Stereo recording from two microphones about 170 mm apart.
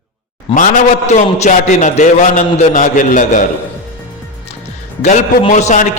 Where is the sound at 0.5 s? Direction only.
50° left (ahead or behind).